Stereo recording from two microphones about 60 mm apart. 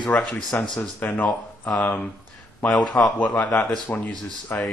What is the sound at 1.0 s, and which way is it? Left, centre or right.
Speech, left.